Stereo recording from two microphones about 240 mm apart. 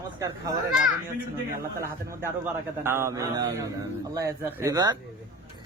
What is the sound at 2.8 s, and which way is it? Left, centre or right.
A man's voice, centre.